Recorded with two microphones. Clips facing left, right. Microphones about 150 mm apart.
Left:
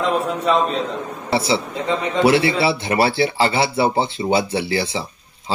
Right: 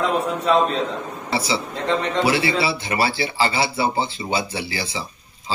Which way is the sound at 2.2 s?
60° left (ahead or behind).